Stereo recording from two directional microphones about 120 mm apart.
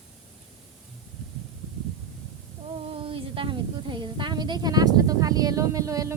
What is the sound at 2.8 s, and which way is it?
A woman's voice, 50° right (ahead or behind).